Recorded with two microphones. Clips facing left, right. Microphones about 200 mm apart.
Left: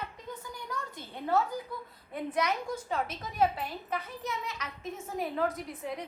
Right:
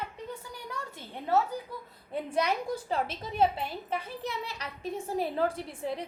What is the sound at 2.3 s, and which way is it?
A woman's voice, 30° right (ahead or behind).